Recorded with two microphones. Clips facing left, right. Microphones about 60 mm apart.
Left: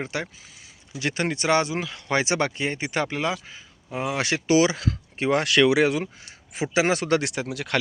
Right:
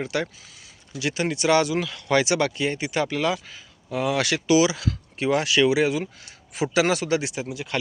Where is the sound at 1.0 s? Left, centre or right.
Left.